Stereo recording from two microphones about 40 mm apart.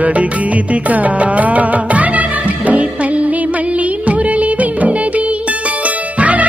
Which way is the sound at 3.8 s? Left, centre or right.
Right.